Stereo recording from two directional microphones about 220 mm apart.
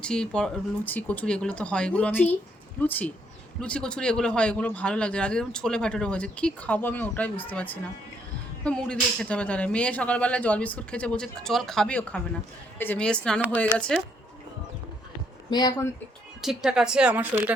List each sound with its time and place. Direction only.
0.0 s a man's voice: 5° left (ahead or behind)
15.4 s speech: 20° left (ahead or behind)
16.4 s a man's voice: centre (ahead or behind)